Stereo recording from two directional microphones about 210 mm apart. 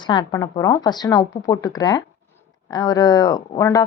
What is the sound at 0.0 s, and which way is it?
Speech, 20° left (ahead or behind).